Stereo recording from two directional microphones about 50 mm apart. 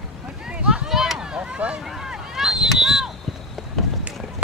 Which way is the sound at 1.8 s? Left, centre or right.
Centre.